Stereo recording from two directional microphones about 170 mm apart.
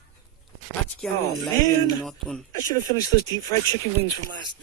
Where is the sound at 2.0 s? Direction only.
Centre (ahead or behind).